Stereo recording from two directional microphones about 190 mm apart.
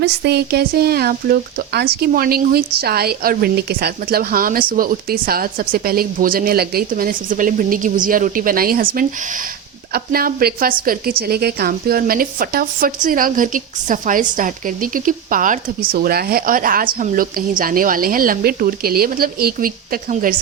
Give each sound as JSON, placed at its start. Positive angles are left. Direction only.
{"t": 0.0, "sound": "speech", "side_deg": -60}